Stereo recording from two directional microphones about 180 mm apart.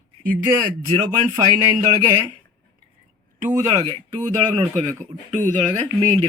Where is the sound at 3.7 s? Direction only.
25° right (ahead or behind).